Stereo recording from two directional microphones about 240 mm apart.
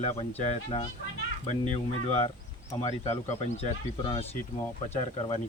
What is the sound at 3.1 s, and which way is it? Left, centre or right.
Speech, left.